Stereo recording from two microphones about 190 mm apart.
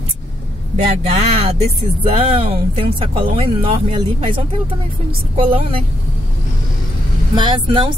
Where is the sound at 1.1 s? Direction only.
35° right (ahead or behind).